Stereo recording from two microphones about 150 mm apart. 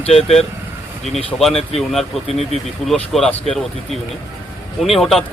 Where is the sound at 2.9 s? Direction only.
Centre (ahead or behind).